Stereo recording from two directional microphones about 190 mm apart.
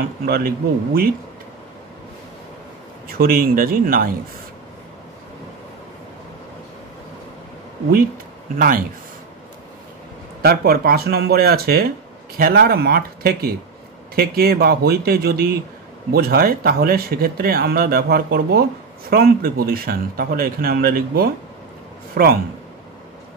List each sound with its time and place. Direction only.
0.2 s speech: 50° right (ahead or behind)
3.1 s speech: 50° right (ahead or behind)
8.5 s speech: 50° right (ahead or behind)
10.4 s a man's voice: 55° right (ahead or behind)